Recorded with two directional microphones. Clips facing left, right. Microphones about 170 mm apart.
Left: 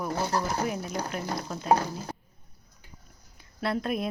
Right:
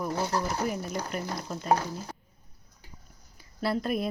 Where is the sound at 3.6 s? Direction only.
Centre (ahead or behind).